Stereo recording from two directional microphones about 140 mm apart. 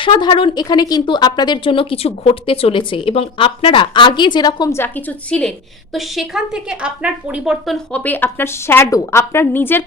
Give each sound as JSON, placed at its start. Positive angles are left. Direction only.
{"t": 0.0, "sound": "a woman's voice", "side_deg": 35}
{"t": 4.8, "sound": "a woman's voice", "side_deg": 15}
{"t": 8.0, "sound": "a woman's voice", "side_deg": 15}